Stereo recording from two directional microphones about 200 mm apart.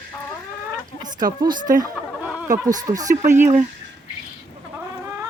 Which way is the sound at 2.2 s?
10° right (ahead or behind).